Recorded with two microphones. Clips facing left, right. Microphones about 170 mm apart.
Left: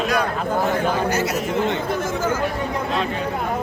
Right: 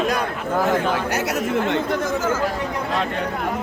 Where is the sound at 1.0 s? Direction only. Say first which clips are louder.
Left 1 dB; 70° right (ahead or behind).